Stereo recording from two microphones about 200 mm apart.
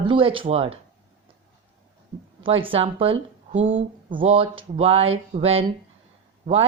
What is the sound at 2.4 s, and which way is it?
Speech, 25° right (ahead or behind).